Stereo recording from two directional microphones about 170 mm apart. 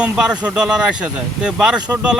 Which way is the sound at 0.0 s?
5° right (ahead or behind).